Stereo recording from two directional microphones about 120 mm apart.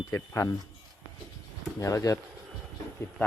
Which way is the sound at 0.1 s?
25° left (ahead or behind).